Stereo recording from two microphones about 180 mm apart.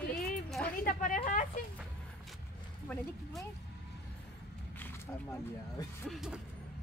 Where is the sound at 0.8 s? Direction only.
50° left (ahead or behind).